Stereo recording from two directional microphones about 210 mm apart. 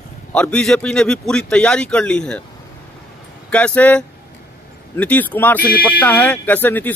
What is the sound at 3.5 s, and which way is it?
Speech, 5° left (ahead or behind).